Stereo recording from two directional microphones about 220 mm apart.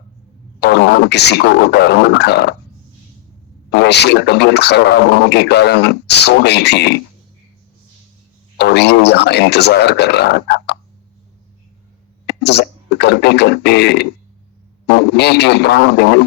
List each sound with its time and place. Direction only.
0.6 s a man's voice: 50° left (ahead or behind)
3.7 s a man's voice: 50° left (ahead or behind)
8.5 s a man's voice: 50° left (ahead or behind)
12.2 s a man's voice: 50° left (ahead or behind)